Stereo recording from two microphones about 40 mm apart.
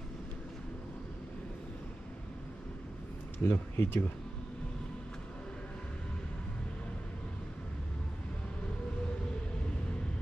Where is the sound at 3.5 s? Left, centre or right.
Left.